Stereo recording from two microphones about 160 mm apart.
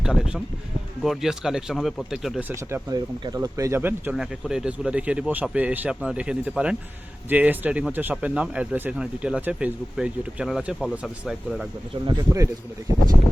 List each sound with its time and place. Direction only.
0.0 s speech: 5° right (ahead or behind)
2.6 s speech: 20° right (ahead or behind); by 11.6 s centre (ahead or behind)
12.0 s speech: 20° right (ahead or behind)